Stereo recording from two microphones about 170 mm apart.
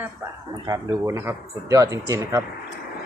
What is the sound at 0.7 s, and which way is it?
Speech, 15° right (ahead or behind).